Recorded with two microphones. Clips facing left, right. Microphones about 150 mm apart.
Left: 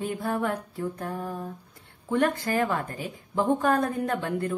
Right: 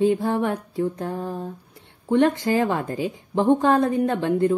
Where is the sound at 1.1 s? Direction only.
30° right (ahead or behind).